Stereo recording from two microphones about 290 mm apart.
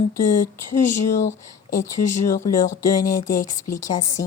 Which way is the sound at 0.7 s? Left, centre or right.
Left.